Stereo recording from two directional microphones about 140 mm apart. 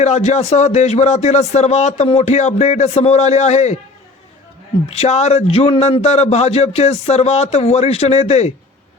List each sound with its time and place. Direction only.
0.0 s speech: 55° left (ahead or behind)
4.9 s speech: 50° left (ahead or behind)